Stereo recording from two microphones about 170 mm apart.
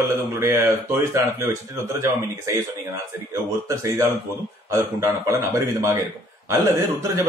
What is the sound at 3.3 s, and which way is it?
Speech, 15° right (ahead or behind).